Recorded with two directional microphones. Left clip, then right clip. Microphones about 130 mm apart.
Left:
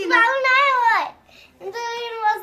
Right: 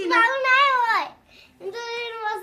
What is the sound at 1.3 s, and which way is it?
Child singing, 35° left (ahead or behind).